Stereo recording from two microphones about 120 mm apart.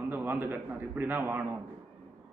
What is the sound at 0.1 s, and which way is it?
A man's voice, 15° right (ahead or behind).